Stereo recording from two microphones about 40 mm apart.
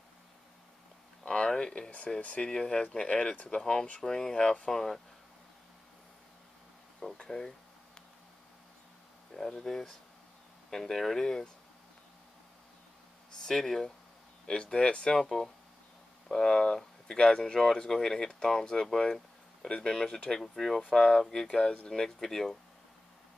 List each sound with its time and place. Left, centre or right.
1.2 s a sound: left
1.5 s speech: left
2.5 s speech: centre
7.0 s a sound: centre
9.5 s speech: centre
13.4 s a sound: centre
14.4 s speech: left
15.1 s speech: centre
20.2 s speech: centre
21.5 s speech: left